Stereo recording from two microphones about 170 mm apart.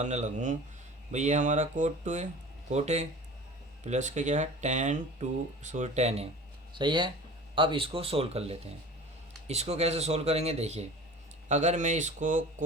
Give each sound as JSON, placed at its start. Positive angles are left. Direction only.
{"t": 0.0, "sound": "speech", "side_deg": -45}
{"t": 6.7, "sound": "speech", "side_deg": -30}